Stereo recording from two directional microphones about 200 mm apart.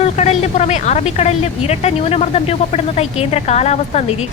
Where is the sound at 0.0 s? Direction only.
35° left (ahead or behind).